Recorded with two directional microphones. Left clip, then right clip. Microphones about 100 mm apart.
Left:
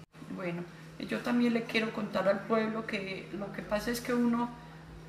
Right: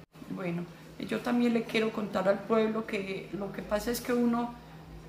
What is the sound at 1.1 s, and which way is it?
A woman's voice, 20° right (ahead or behind).